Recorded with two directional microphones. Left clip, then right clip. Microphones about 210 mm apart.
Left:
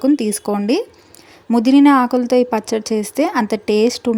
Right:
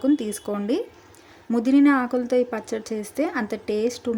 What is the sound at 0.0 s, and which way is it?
Speech, 30° left (ahead or behind).